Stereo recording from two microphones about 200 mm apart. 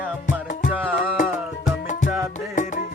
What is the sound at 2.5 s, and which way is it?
Music, 40° left (ahead or behind).